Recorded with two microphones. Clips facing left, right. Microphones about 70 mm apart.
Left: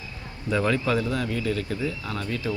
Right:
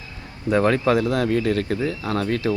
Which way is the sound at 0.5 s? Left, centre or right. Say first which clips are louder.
Right 5 dB; right.